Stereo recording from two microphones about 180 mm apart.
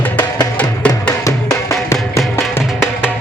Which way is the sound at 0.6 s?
10° left (ahead or behind).